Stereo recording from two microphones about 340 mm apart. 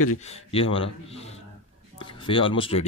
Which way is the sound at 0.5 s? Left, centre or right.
Centre.